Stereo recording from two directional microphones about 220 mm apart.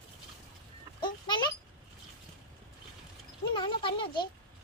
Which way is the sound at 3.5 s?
20° left (ahead or behind).